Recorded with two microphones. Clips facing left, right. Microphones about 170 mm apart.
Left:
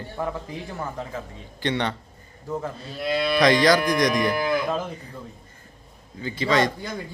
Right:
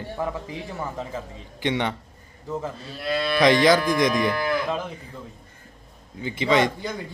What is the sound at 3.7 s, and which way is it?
Moo, 15° left (ahead or behind).